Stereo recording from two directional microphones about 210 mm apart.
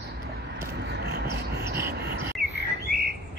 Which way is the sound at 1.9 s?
50° right (ahead or behind).